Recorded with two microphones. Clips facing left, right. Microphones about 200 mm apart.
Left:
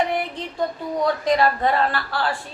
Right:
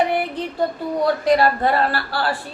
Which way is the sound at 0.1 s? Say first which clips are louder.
Right 3 dB; 5° right (ahead or behind).